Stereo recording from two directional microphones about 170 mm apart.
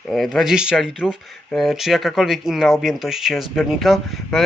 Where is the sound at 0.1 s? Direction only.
Centre (ahead or behind).